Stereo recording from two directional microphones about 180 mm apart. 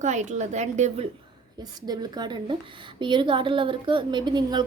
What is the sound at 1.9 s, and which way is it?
A woman's voice, 25° right (ahead or behind).